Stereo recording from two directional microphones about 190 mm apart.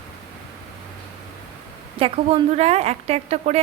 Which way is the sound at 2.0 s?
30° right (ahead or behind).